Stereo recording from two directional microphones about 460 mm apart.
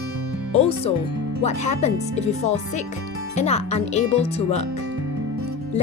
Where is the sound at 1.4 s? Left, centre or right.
Centre.